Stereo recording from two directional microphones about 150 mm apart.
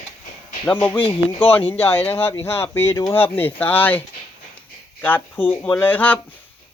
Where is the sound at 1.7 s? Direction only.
15° left (ahead or behind).